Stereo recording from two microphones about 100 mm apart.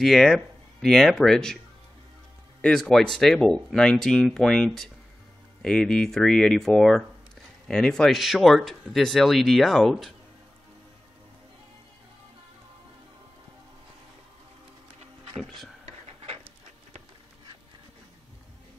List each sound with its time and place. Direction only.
0.0 s speech: centre (ahead or behind)
2.6 s speech: 5° left (ahead or behind)
15.3 s speech: centre (ahead or behind)